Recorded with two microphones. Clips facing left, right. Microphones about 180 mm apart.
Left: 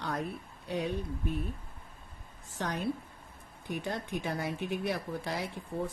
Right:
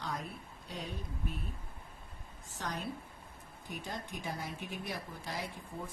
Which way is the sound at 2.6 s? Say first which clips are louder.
Left 5 dB; 65° left (ahead or behind).